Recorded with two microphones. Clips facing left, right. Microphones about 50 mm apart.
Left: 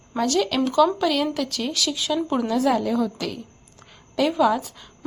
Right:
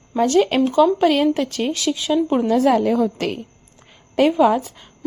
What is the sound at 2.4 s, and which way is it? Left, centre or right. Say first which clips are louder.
Speech: right 5 dB; right.